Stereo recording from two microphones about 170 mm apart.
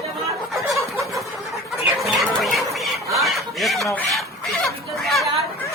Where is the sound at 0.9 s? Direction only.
Centre (ahead or behind).